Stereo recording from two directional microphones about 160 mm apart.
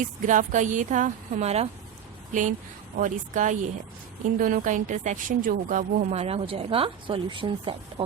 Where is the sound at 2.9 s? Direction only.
50° right (ahead or behind).